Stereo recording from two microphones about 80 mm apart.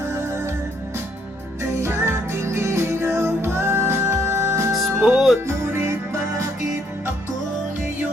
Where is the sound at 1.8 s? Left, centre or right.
Right.